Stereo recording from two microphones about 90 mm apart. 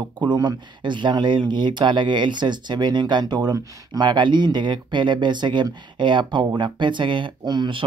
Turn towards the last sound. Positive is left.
turn(degrees=-55)  # may be behind; listen again after turning